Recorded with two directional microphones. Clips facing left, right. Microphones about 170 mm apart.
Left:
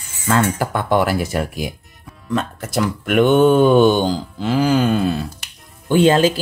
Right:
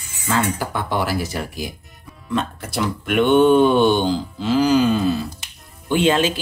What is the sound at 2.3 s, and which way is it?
Speech, 45° left (ahead or behind).